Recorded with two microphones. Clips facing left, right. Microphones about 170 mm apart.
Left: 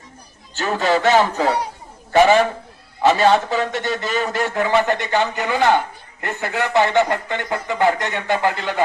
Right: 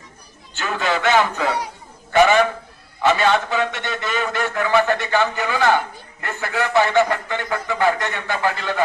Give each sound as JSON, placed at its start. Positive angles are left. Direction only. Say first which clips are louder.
{"t": 0.5, "sound": "a man's voice", "louder": "left 4 dB", "side_deg": 35}